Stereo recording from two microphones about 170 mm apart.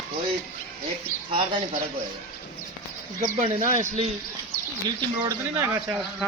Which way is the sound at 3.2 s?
50° right (ahead or behind).